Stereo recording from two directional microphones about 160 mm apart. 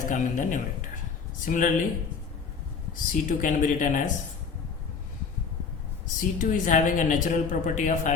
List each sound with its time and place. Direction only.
0.1 s speech: 55° left (ahead or behind)
2.9 s speech: 55° left (ahead or behind)
6.1 s speech: 55° left (ahead or behind)